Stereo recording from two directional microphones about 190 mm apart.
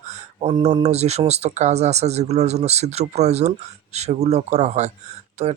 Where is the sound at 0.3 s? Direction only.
30° right (ahead or behind).